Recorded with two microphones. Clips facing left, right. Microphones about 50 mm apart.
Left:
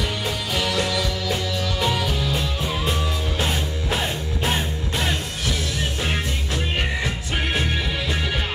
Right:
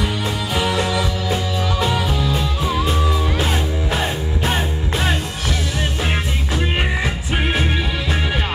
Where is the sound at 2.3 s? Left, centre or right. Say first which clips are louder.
Right 4 dB; centre.